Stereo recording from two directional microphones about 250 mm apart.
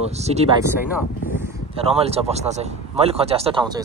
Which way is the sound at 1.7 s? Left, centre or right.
Right.